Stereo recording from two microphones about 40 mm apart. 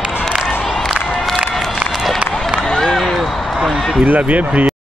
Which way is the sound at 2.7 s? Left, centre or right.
Centre.